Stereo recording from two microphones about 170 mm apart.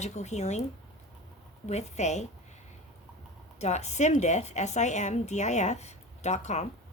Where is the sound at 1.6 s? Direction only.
40° left (ahead or behind).